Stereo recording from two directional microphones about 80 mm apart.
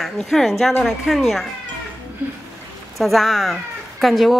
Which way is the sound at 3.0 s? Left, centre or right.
Centre.